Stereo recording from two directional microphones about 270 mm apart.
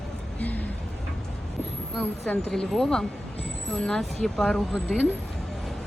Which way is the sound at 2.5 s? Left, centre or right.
Centre.